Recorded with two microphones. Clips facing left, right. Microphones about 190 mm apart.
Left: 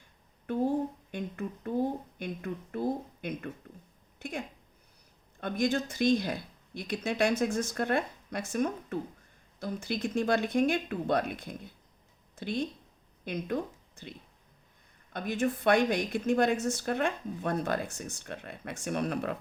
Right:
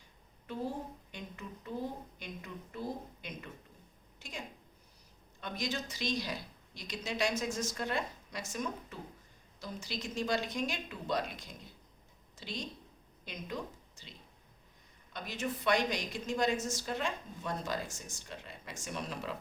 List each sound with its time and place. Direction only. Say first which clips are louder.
0.5 s speech: left 10 dB; 55° left (ahead or behind)
2.1 s a sound: left 9 dB; 55° left (ahead or behind)
5.4 s a woman's voice: left 9 dB; 55° left (ahead or behind)